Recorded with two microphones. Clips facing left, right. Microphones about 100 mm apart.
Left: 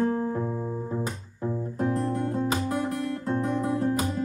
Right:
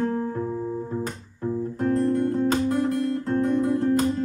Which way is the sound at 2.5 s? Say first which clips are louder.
Right 5 dB; 10° left (ahead or behind).